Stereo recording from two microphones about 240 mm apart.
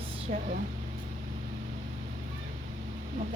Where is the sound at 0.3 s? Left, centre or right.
Right.